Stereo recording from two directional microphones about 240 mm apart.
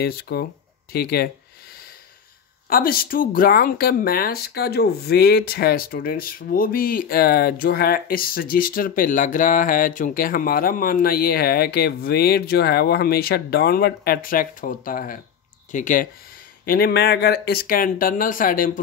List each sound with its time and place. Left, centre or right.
0.0 s speech: left
2.7 s speech: left